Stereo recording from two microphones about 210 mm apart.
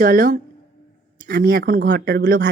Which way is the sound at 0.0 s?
40° right (ahead or behind).